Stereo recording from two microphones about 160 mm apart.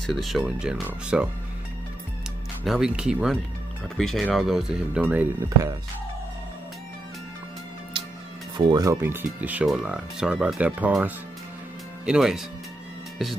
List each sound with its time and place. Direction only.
0.0 s speech: centre (ahead or behind)
2.6 s speech: centre (ahead or behind)
8.0 s music: 30° right (ahead or behind)
8.5 s speech: 25° right (ahead or behind); by 12.4 s 5° right (ahead or behind)